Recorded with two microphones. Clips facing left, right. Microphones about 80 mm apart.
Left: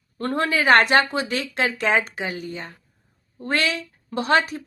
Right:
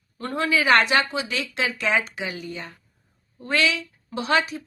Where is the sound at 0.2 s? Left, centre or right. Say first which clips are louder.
Left 1 dB; left.